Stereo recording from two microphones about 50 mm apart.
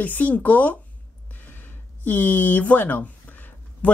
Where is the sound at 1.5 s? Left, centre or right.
Left.